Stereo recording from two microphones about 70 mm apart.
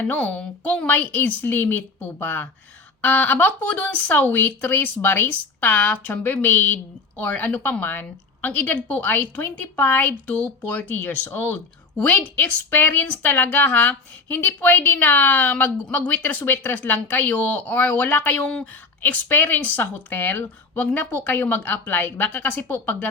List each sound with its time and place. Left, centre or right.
0.0 s a woman's voice: left
11.9 s a woman's voice: left